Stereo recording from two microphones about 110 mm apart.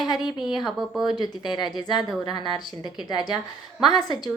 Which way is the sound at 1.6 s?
Centre (ahead or behind).